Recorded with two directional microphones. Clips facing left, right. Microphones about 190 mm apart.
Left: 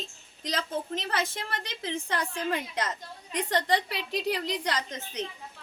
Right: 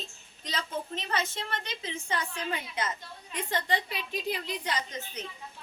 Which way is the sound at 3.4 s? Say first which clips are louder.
Left 4 dB; 75° left (ahead or behind).